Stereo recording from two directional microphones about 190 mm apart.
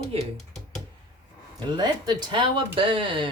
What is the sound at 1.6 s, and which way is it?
Speech, 20° right (ahead or behind).